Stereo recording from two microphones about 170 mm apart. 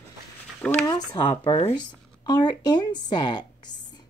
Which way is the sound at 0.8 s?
25° left (ahead or behind).